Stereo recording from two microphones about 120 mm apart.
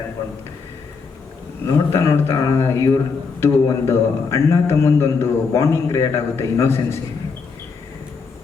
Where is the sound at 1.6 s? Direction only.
25° left (ahead or behind).